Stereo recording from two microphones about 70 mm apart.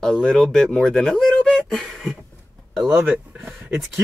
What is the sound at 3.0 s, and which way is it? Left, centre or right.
Speech, centre.